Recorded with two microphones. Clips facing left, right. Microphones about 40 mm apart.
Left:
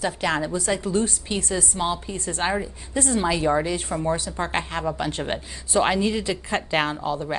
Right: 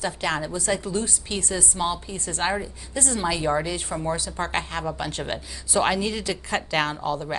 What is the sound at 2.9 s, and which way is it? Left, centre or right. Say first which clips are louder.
A woman's voice: left 3 dB; left.